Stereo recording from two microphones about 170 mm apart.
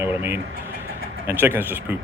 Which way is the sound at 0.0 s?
15° right (ahead or behind).